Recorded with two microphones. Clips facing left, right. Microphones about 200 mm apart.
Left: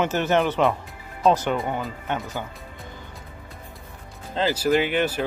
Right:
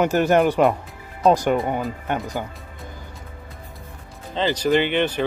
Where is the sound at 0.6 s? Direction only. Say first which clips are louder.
Right 3 dB; centre (ahead or behind).